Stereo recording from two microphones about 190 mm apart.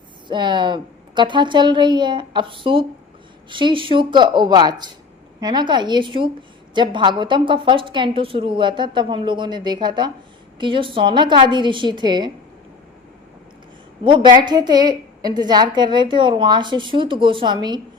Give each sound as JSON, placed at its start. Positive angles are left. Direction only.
{"t": 0.3, "sound": "a woman's voice", "side_deg": -25}
{"t": 14.0, "sound": "a woman's voice", "side_deg": -25}